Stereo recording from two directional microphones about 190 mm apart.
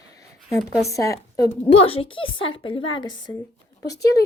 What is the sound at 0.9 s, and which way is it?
Speech, 15° left (ahead or behind).